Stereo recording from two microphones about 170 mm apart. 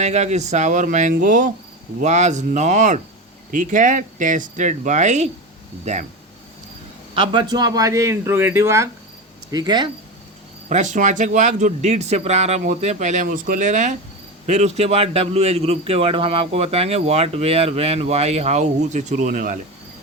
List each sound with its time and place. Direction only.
0.0 s speech: 40° right (ahead or behind)
7.1 s speech: 30° right (ahead or behind)
10.7 s a man's voice: 45° right (ahead or behind)